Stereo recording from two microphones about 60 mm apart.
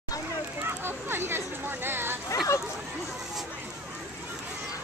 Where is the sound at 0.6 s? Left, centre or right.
Right.